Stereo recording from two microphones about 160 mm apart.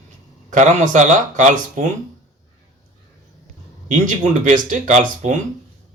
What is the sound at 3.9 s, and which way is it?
Speech, 55° right (ahead or behind).